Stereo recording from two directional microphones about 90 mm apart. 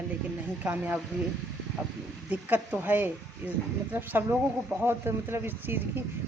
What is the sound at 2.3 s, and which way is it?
Speech, 20° right (ahead or behind).